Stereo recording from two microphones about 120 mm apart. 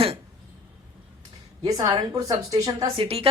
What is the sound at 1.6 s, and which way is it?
A woman's voice, 30° right (ahead or behind).